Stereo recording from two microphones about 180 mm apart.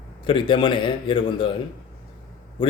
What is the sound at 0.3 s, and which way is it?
Speech, 25° left (ahead or behind).